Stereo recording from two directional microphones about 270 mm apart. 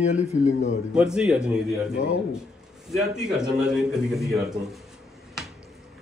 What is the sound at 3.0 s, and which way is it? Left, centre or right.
A man's voice, centre.